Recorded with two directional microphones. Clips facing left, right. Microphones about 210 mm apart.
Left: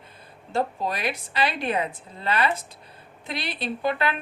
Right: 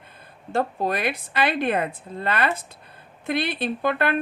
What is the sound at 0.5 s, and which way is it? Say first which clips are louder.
A woman's voice: right 3 dB; 55° right (ahead or behind).